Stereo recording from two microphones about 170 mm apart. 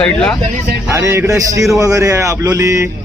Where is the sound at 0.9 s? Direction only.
15° right (ahead or behind).